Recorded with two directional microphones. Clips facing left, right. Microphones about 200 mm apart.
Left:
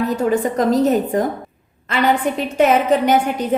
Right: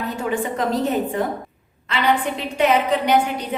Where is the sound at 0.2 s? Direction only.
40° left (ahead or behind).